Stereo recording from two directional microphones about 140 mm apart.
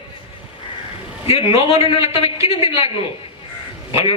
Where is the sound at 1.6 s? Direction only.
45° left (ahead or behind).